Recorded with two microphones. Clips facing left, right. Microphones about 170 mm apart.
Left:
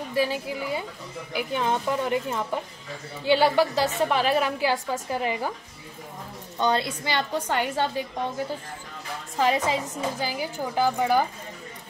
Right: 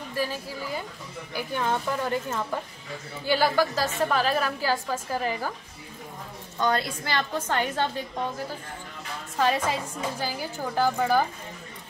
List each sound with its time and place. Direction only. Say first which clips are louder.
0.1 s a woman's voice: left 5 dB; 15° left (ahead or behind)
6.6 s a woman's voice: left 1 dB; 20° left (ahead or behind)
9.4 s a woman's voice: left 1 dB; 15° left (ahead or behind)